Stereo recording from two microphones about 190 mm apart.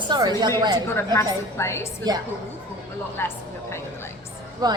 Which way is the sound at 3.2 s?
15° left (ahead or behind).